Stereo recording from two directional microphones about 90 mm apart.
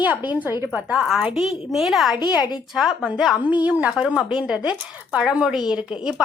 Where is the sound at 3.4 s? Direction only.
20° right (ahead or behind).